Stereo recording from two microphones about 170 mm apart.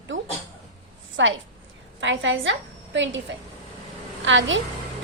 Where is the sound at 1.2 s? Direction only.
90° right.